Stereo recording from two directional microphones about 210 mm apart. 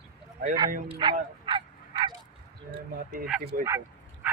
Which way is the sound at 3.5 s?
45° right (ahead or behind).